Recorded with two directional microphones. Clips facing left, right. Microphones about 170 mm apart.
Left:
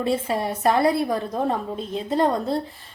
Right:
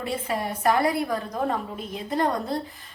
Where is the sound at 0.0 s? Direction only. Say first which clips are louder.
Left 5 dB; 25° left (ahead or behind).